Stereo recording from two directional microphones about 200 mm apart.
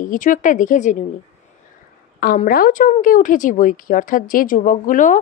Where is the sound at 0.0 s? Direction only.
40° left (ahead or behind).